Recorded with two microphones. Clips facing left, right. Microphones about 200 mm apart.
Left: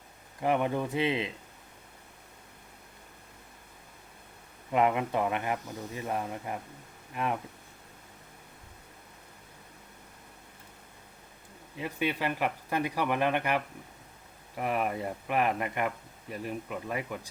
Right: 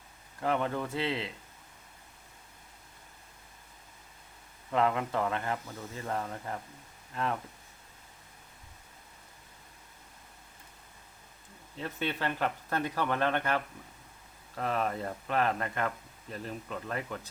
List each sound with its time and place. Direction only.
0.3 s speech: 15° left (ahead or behind)
4.7 s speech: 15° left (ahead or behind)
11.8 s speech: 10° left (ahead or behind)